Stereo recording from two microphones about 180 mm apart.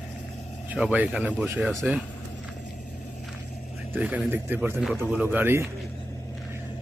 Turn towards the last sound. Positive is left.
turn(degrees=-10)  # may be behind; listen again after turning